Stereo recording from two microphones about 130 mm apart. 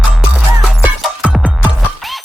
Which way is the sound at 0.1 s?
Centre (ahead or behind).